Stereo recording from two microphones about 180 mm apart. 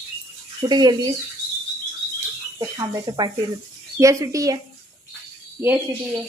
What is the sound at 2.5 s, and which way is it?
Speech, 20° right (ahead or behind).